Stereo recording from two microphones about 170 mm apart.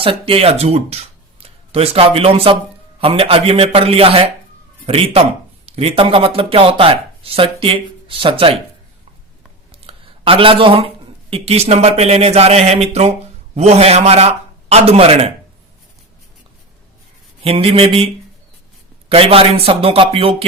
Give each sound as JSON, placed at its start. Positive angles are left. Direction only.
{"t": 0.0, "sound": "speech", "side_deg": -35}
{"t": 9.8, "sound": "speech", "side_deg": -30}
{"t": 17.4, "sound": "speech", "side_deg": -35}